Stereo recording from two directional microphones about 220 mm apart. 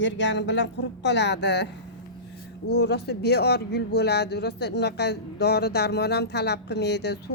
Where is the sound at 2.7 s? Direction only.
50° left (ahead or behind).